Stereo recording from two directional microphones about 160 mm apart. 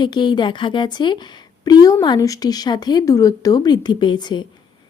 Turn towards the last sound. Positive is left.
turn(degrees=30)  # may be behind; listen again after turning